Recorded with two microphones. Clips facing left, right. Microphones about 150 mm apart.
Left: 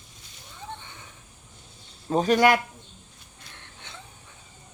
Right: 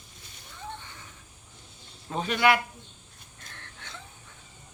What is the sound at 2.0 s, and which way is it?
Speech, 40° left (ahead or behind).